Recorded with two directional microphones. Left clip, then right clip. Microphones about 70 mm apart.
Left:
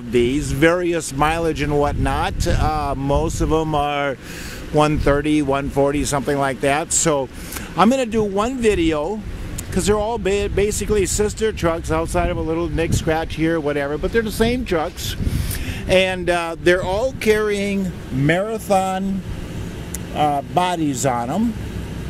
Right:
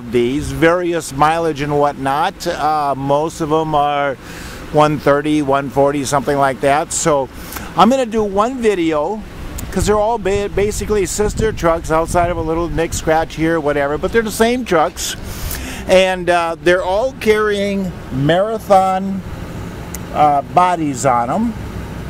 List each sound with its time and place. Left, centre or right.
0.1 s speech: centre
4.7 s speech: centre
14.0 s speech: right
15.9 s speech: centre
20.2 s speech: centre